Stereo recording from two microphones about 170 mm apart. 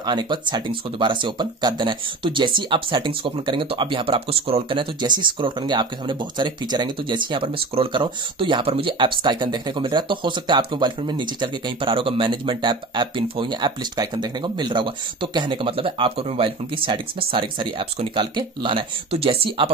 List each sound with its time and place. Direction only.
0.0 s speech: 25° right (ahead or behind)